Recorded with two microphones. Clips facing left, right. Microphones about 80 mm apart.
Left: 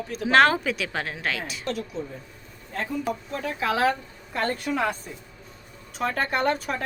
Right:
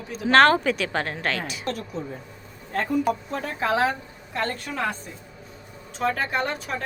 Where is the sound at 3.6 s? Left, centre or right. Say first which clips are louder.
Right 2 dB; right.